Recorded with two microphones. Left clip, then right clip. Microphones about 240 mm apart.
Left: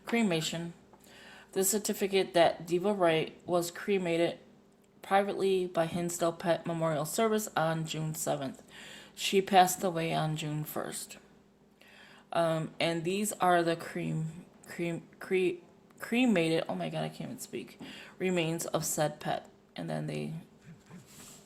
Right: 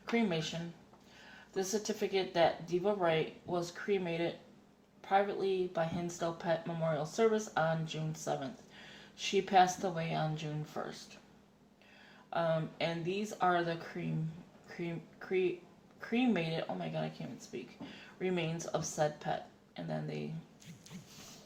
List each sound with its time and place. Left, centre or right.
0.1 s speech: left
1.5 s speech: left
12.3 s speech: left